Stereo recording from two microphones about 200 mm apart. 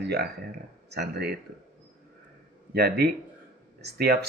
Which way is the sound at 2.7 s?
55° right (ahead or behind).